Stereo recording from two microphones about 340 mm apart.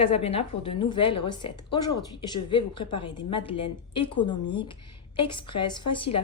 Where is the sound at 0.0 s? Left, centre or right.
Centre.